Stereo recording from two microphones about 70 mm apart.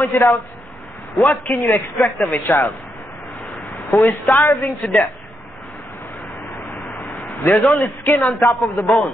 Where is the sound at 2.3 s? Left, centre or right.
Left.